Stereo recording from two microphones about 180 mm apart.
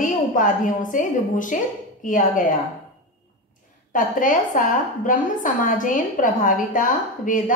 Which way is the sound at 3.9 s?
45° left (ahead or behind).